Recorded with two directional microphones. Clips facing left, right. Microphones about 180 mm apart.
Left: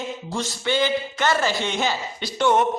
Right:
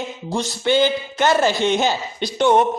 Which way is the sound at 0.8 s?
25° right (ahead or behind).